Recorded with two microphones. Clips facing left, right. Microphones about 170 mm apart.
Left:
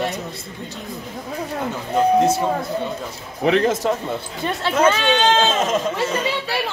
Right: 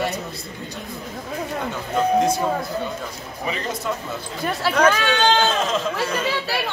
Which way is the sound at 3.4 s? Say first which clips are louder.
Left 10 dB; 70° left (ahead or behind).